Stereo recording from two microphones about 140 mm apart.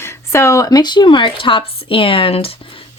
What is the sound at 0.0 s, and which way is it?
Speech, 20° left (ahead or behind).